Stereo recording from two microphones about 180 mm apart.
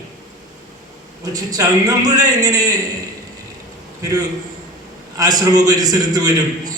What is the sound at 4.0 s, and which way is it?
A man's voice, 20° right (ahead or behind).